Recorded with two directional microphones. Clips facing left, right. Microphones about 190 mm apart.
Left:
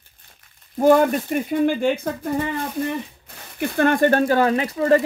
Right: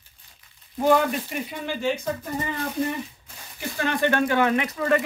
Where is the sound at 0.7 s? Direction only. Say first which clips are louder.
Left 5 dB; 45° left (ahead or behind).